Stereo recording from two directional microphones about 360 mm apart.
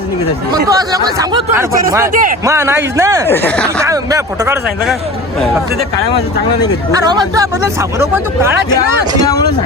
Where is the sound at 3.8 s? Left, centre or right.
Centre.